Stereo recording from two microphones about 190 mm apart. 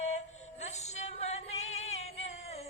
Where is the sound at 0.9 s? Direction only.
35° left (ahead or behind).